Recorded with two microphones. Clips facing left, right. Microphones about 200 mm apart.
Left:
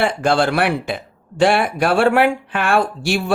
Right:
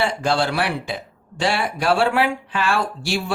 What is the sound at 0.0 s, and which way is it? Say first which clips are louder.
Speech: left 4 dB; 55° left (ahead or behind).